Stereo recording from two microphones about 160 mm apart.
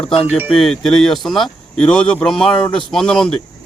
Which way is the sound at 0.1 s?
35° left (ahead or behind).